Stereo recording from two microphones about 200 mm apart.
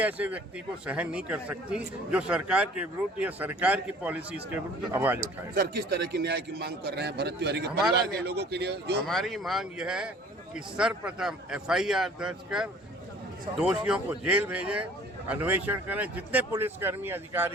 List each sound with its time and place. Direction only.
0.0 s a man's voice: 5° right (ahead or behind)
5.5 s a man's voice: 50° right (ahead or behind)
9.0 s a man's voice: centre (ahead or behind)